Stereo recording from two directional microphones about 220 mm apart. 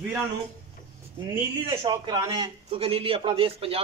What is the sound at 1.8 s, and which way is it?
A man's voice, 20° right (ahead or behind).